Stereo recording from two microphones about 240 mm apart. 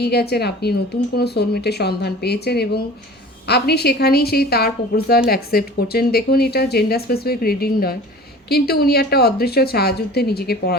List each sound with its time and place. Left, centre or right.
0.0 s speech: left